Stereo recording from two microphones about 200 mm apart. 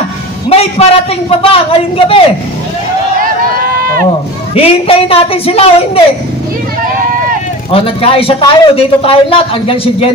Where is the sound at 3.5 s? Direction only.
45° right (ahead or behind).